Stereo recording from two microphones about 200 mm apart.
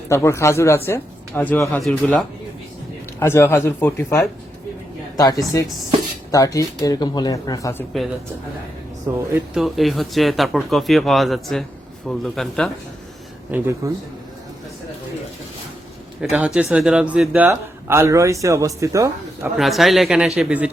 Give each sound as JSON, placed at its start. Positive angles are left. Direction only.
{"t": 0.1, "sound": "speech", "side_deg": 15}
{"t": 9.6, "sound": "speech", "side_deg": 0}
{"t": 13.5, "sound": "a man's voice", "side_deg": -15}
{"t": 16.2, "sound": "a man's voice", "side_deg": -5}
{"t": 19.5, "sound": "speech", "side_deg": 0}